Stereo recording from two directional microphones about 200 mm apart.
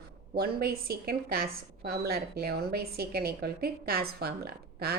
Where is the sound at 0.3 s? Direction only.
50° right (ahead or behind).